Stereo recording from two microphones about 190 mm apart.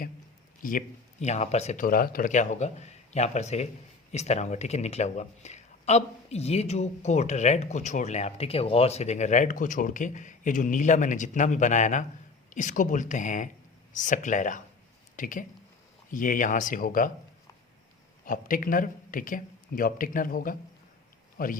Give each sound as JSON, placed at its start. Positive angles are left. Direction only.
{"t": 0.6, "sound": "speech", "side_deg": 45}
{"t": 18.3, "sound": "speech", "side_deg": 45}